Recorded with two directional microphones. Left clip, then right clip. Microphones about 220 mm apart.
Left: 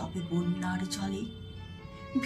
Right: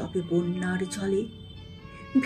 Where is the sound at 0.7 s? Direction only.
15° right (ahead or behind).